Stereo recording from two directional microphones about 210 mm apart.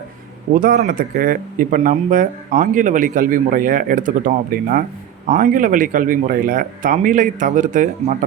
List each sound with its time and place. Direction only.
0.5 s speech: 40° right (ahead or behind)